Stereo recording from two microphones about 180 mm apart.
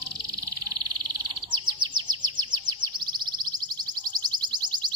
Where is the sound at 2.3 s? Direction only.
25° right (ahead or behind).